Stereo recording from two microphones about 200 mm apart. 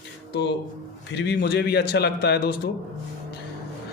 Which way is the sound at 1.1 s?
60° left (ahead or behind).